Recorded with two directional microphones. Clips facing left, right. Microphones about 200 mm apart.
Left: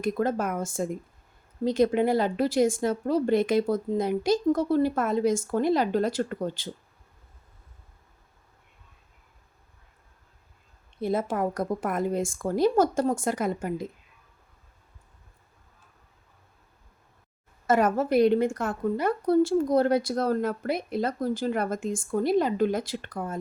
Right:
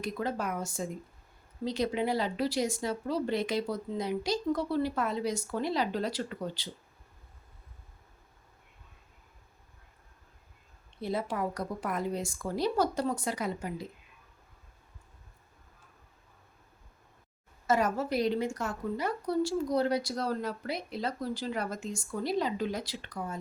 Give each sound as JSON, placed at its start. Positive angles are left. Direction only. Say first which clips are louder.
{"t": 0.0, "sound": "a woman's voice", "louder": "left 7 dB", "side_deg": 50}
{"t": 11.0, "sound": "a woman's voice", "louder": "left 6 dB", "side_deg": 50}
{"t": 17.7, "sound": "a woman's voice", "louder": "left 6 dB", "side_deg": 55}